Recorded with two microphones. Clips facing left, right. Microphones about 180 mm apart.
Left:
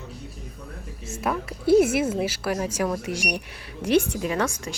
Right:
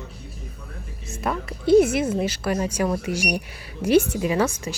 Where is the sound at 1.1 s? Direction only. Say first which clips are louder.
Even; 5° left (ahead or behind).